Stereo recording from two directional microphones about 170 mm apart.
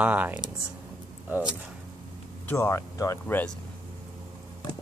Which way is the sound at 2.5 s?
15° left (ahead or behind).